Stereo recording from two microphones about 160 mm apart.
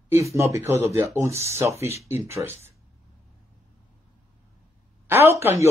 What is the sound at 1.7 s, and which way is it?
Speech, 40° left (ahead or behind).